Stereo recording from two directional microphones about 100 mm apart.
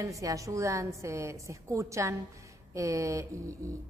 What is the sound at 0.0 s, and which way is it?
A woman's voice, 35° right (ahead or behind).